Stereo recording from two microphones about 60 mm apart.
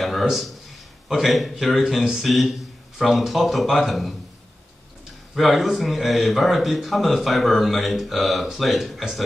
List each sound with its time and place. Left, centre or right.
0.0 s a man's voice: centre
5.3 s speech: centre